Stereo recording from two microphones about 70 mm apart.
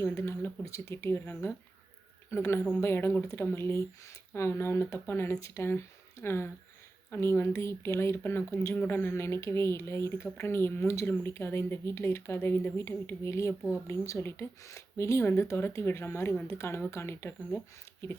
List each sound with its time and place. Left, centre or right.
0.0 s speech: left